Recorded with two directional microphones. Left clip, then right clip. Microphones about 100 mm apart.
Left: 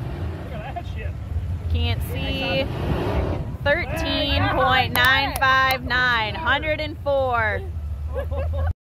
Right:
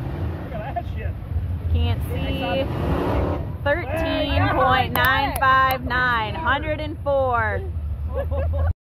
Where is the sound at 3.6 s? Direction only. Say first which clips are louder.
Left 2 dB; 45° left (ahead or behind).